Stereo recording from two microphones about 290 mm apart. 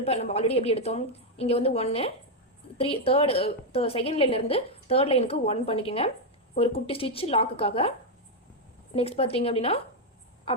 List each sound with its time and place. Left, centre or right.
0.0 s a woman's voice: left
9.0 s a woman's voice: centre